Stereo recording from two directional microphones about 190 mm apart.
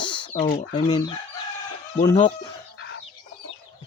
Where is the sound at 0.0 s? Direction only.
25° left (ahead or behind).